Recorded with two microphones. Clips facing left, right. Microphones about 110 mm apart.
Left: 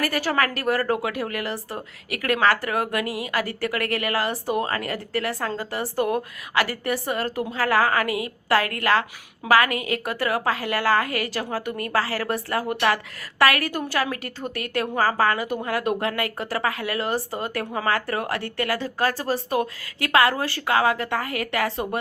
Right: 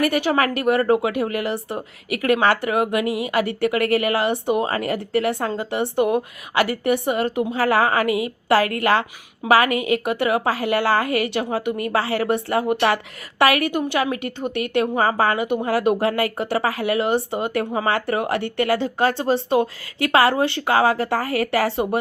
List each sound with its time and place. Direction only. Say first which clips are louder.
0.3 s speech: right 4 dB; 20° right (ahead or behind)
13.7 s speech: right 4 dB; 20° right (ahead or behind)